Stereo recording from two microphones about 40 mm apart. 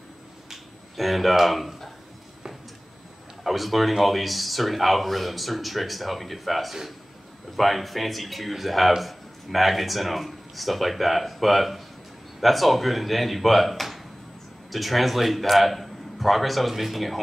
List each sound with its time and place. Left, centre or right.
0.5 s finger snapping: centre
3.4 s speech: centre